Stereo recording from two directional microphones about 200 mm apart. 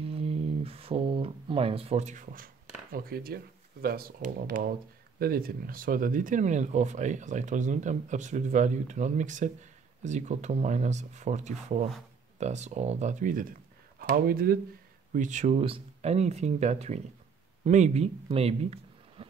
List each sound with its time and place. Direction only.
0.0 s speech: 30° right (ahead or behind); by 14.6 s 45° right (ahead or behind)
15.1 s speech: 35° right (ahead or behind)